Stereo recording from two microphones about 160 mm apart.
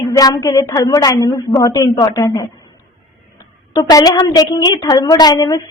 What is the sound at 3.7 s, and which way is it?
A woman's voice, 25° left (ahead or behind).